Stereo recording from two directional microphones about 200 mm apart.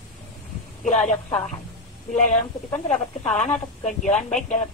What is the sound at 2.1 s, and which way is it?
Speech, 40° left (ahead or behind).